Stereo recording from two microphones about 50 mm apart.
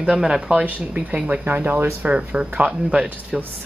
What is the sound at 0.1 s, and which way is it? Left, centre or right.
Speech, centre.